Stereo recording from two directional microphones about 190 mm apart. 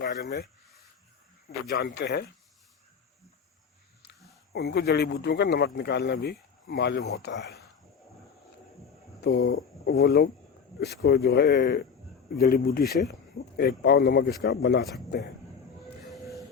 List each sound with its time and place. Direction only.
0.0 s speech: 60° left (ahead or behind)
1.7 s speech: 60° left (ahead or behind)
4.5 s speech: 60° left (ahead or behind)
9.2 s speech: 60° left (ahead or behind)
12.4 s speech: 50° left (ahead or behind)